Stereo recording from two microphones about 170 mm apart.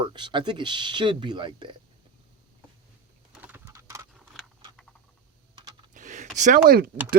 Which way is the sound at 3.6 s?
20° right (ahead or behind).